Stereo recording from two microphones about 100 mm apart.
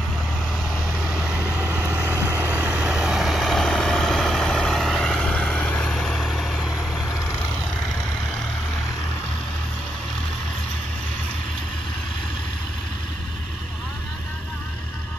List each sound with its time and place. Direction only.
0.9 s vehicle: 10° right (ahead or behind)
2.8 s vehicle: 5° right (ahead or behind)